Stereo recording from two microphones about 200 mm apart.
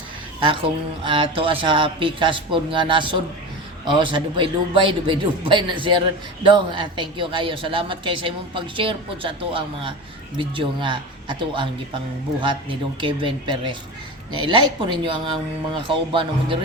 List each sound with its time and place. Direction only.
0.4 s speech: 25° right (ahead or behind)